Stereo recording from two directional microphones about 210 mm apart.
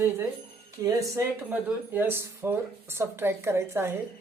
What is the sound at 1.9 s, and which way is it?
Speech, 10° right (ahead or behind).